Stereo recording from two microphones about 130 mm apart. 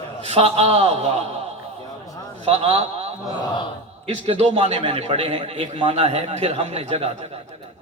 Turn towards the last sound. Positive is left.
turn(degrees=-50)  # may be behind; listen again after turning